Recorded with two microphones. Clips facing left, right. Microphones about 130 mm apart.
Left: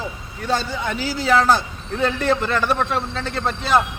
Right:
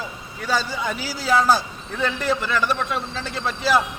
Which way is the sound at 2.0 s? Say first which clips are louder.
Left 3 dB; 60° left (ahead or behind).